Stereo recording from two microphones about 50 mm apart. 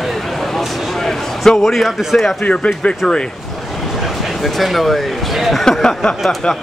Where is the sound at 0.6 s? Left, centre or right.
Centre.